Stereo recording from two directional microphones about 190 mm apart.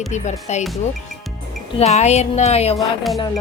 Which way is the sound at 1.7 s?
35° left (ahead or behind).